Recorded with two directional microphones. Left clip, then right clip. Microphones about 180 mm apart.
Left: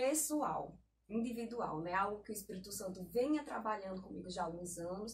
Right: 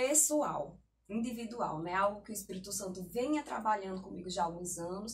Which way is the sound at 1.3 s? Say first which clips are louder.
Right 3 dB; 15° right (ahead or behind).